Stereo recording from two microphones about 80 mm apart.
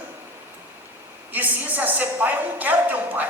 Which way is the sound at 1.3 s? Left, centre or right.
Right.